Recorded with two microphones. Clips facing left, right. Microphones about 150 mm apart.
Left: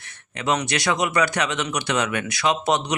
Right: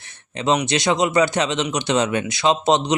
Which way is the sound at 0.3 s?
25° right (ahead or behind).